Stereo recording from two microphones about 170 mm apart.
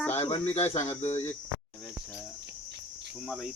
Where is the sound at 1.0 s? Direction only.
40° left (ahead or behind).